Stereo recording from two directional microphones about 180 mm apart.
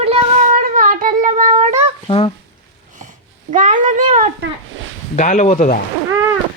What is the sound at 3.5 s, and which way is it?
Cat, 45° right (ahead or behind).